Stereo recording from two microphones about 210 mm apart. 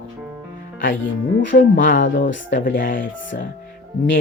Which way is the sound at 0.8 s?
65° left (ahead or behind).